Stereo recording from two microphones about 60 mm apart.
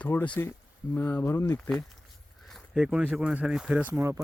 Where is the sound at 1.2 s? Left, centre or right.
Left.